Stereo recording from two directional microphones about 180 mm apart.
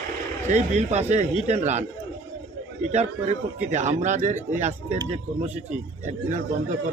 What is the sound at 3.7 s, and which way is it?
A man's voice, 40° right (ahead or behind).